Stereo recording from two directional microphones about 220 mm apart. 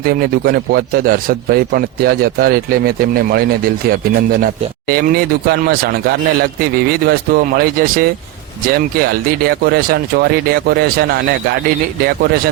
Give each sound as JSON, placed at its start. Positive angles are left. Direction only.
{"t": 0.0, "sound": "a man's voice", "side_deg": -45}